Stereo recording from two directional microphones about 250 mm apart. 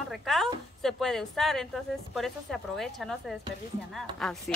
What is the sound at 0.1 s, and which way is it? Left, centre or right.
Speech, centre.